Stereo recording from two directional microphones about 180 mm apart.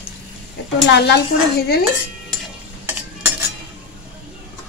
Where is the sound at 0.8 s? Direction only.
70° left (ahead or behind).